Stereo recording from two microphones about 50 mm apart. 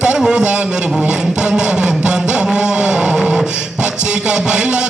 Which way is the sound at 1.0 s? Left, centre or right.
Centre.